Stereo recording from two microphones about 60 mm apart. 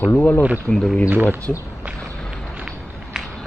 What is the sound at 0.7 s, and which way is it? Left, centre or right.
Speech, centre.